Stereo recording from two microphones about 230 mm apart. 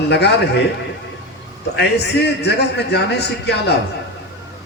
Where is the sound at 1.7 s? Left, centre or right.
Left.